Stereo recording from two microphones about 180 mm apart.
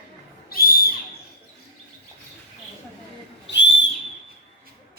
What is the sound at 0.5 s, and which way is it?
Owl, 55° left (ahead or behind).